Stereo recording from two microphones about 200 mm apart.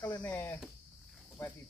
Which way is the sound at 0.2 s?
10° left (ahead or behind).